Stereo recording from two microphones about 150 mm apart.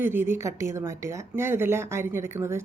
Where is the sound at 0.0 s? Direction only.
15° right (ahead or behind).